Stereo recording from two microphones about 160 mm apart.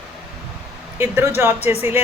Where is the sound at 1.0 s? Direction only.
15° right (ahead or behind).